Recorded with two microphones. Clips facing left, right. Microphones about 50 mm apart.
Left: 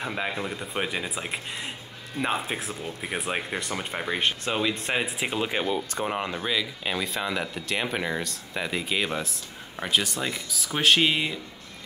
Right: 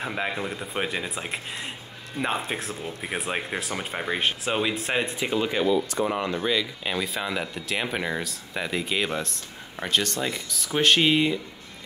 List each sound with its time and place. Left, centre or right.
0.0 s speech: centre
5.2 s speech: centre
6.3 s speech: centre